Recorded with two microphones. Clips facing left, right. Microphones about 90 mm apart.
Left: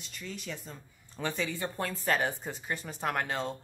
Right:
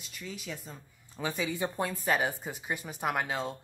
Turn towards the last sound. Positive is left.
turn(degrees=-5)  # may be behind; listen again after turning